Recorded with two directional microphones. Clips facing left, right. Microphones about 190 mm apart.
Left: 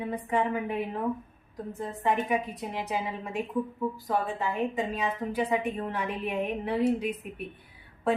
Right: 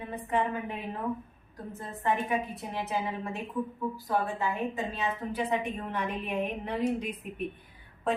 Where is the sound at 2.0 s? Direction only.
15° left (ahead or behind).